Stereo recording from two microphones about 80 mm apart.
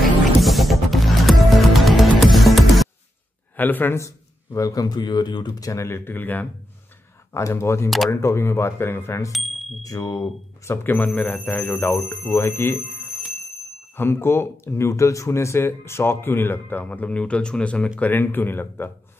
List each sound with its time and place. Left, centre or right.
0.0 s music: centre
3.5 s speech: left
4.0 s speech: left
7.3 s speech: left
9.3 s bicycle bell: centre
9.8 s speech: left
10.7 s speech: left
13.9 s speech: left; by 17.8 s centre
17.9 s speech: left